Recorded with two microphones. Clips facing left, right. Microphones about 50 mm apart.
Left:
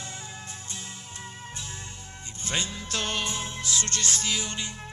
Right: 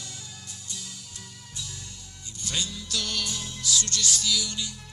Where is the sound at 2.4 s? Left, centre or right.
Left.